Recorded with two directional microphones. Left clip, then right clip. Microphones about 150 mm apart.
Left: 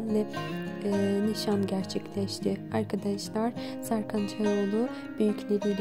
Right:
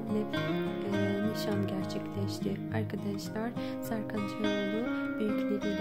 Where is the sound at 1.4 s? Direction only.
40° left (ahead or behind).